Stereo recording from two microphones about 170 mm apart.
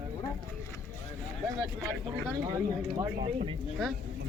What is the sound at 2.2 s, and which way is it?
Speech, 25° right (ahead or behind).